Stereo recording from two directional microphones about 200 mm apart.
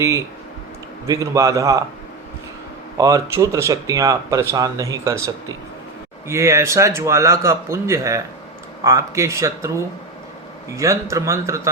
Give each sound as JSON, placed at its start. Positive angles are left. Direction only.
{"t": 1.0, "sound": "speech", "side_deg": -15}
{"t": 3.0, "sound": "speech", "side_deg": -15}